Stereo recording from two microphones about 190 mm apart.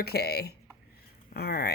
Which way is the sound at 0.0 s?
55° left (ahead or behind).